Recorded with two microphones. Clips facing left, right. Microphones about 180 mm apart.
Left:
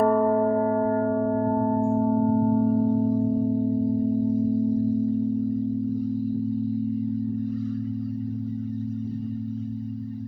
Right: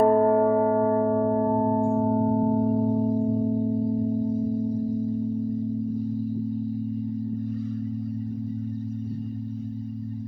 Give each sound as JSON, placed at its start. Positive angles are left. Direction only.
{"t": 0.0, "sound": "music", "side_deg": -10}
{"t": 0.6, "sound": "music", "side_deg": -25}